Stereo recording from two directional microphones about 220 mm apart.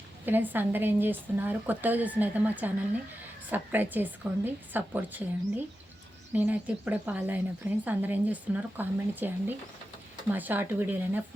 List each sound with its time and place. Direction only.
0.3 s speech: 10° right (ahead or behind)